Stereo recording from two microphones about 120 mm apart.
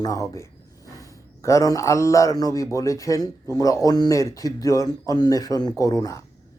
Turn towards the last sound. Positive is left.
turn(degrees=30)  # may be behind; listen again after turning